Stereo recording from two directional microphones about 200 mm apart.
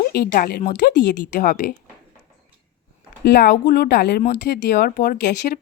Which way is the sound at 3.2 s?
55° left (ahead or behind).